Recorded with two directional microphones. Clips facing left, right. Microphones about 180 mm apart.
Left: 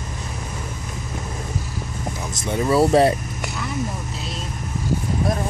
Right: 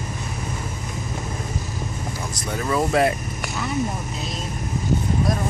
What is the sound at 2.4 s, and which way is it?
Speech, 25° left (ahead or behind).